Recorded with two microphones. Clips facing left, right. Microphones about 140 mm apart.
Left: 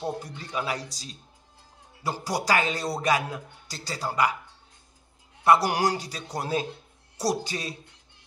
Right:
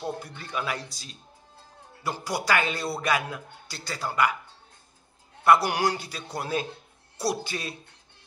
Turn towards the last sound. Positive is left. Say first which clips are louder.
# left 1 dB
turn(degrees=35)  # may be behind; listen again after turning